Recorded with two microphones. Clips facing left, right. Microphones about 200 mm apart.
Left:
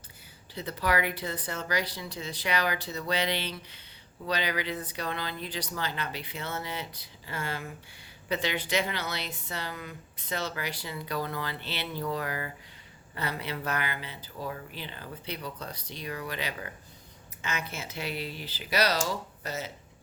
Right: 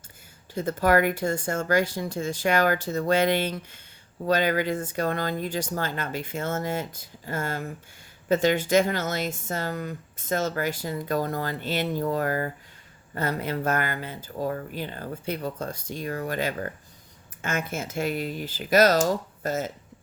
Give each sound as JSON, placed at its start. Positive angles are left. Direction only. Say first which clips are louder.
{"t": 0.5, "sound": "speech", "louder": "right 8 dB", "side_deg": -45}